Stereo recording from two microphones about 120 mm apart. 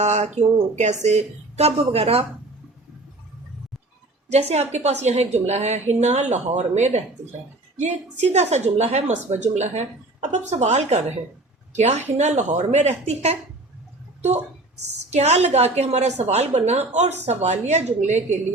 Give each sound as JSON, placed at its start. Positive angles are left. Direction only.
{"t": 0.0, "sound": "a woman's voice", "side_deg": -75}
{"t": 4.3, "sound": "a woman's voice", "side_deg": -65}